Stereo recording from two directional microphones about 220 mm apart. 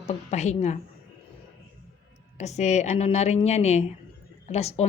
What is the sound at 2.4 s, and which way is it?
Speech, 30° left (ahead or behind).